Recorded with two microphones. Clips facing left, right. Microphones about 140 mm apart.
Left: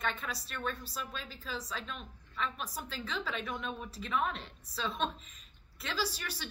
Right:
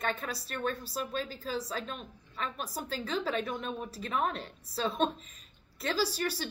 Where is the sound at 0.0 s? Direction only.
40° right (ahead or behind).